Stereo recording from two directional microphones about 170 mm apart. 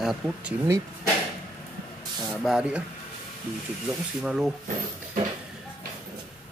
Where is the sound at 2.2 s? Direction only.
Centre (ahead or behind).